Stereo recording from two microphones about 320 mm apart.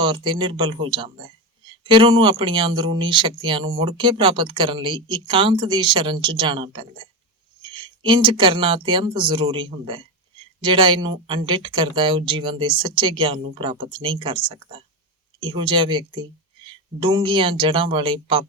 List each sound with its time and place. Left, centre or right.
0.0 s speech: centre